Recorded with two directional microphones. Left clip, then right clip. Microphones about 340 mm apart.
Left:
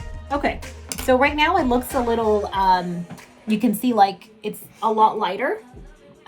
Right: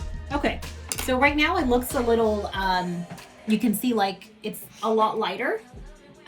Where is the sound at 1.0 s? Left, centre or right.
Centre.